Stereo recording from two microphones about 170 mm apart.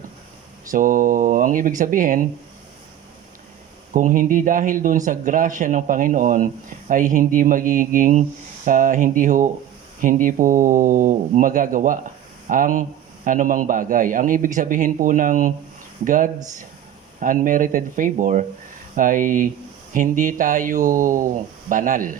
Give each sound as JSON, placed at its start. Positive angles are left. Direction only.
{"t": 0.7, "sound": "speech", "side_deg": -50}
{"t": 3.9, "sound": "speech", "side_deg": -50}